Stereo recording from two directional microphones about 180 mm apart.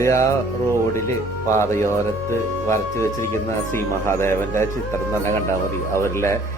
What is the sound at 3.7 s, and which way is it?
Speech, 15° left (ahead or behind).